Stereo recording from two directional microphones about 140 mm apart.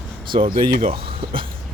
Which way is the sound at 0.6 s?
45° right (ahead or behind).